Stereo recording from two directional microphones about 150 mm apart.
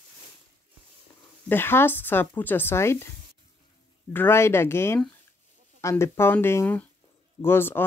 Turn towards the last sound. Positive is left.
turn(degrees=15)  # may be behind; listen again after turning